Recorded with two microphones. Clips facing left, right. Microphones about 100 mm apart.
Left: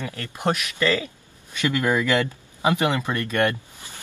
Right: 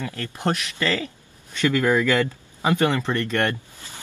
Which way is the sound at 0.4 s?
15° left (ahead or behind).